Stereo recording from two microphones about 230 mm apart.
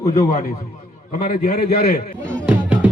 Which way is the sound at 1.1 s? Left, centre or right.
Left.